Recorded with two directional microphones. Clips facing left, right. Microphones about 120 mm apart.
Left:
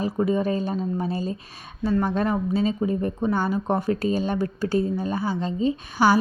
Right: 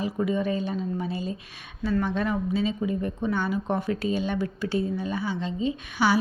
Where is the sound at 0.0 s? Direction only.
35° left (ahead or behind).